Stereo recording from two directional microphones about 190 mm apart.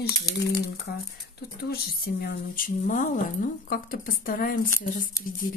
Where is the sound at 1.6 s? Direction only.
55° left (ahead or behind).